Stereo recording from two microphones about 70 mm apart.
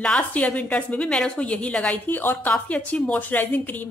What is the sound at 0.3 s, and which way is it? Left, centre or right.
A woman's voice, centre.